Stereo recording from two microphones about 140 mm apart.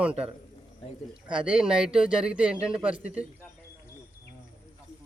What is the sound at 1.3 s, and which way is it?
A man's voice, 5° right (ahead or behind).